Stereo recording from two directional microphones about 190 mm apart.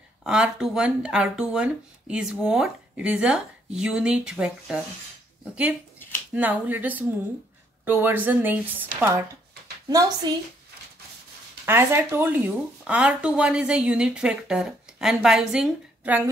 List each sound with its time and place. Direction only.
0.2 s a woman's voice: 5° right (ahead or behind); by 10.3 s 20° right (ahead or behind)
11.6 s speech: 10° right (ahead or behind)